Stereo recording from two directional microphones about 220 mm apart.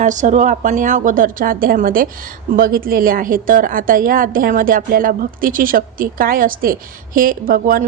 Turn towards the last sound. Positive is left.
turn(degrees=-40)  # may be behind; listen again after turning